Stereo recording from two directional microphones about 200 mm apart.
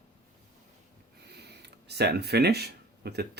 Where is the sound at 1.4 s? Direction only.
55° right (ahead or behind).